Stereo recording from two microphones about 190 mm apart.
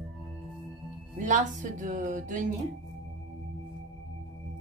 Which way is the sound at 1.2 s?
40° right (ahead or behind).